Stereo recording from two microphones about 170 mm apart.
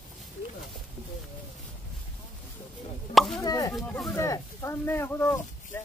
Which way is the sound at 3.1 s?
Centre (ahead or behind).